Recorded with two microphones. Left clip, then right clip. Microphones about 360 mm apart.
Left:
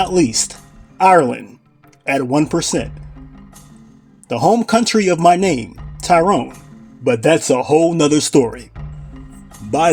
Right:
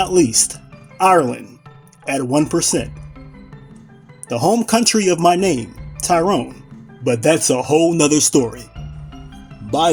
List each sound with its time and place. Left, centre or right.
0.0 s speech: right
4.3 s speech: right